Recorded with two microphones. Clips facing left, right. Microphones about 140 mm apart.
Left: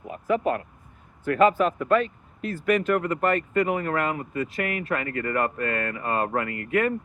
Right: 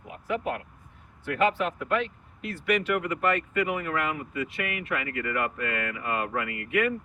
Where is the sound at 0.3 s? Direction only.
45° left (ahead or behind).